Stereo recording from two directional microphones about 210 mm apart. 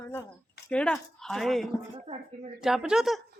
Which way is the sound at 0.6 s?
5° left (ahead or behind).